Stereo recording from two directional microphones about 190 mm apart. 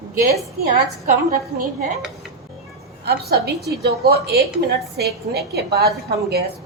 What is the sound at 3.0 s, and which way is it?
A woman's voice, 55° right (ahead or behind).